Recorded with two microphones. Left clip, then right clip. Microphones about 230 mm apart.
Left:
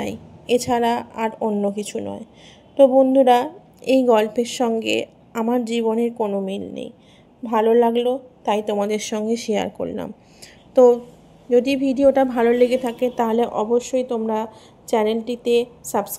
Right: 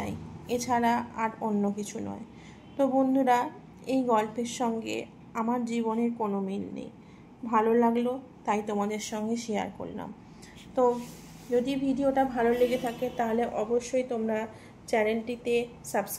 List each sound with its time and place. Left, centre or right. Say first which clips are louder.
0.0 s a woman's voice: left 9 dB; left